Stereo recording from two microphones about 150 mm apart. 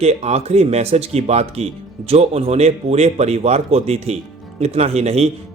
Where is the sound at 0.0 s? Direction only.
45° right (ahead or behind).